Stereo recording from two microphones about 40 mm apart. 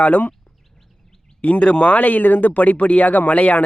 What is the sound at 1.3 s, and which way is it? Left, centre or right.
Speech, left.